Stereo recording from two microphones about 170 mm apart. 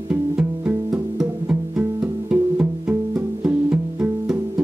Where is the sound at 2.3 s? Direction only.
10° right (ahead or behind).